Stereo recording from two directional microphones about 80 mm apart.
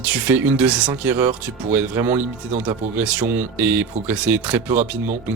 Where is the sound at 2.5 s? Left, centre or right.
Centre.